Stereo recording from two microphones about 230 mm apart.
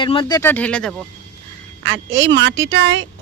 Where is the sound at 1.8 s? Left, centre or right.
Right.